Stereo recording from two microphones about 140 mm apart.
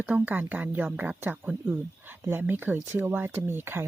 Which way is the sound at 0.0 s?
10° right (ahead or behind).